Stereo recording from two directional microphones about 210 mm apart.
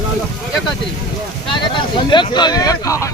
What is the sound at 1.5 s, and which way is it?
Speech, 20° left (ahead or behind).